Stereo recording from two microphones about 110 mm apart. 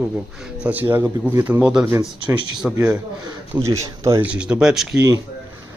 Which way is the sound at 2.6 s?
10° right (ahead or behind).